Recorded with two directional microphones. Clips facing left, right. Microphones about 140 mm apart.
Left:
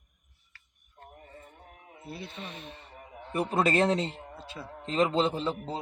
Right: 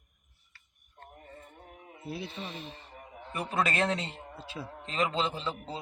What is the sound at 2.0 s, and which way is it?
Speech, 5° right (ahead or behind).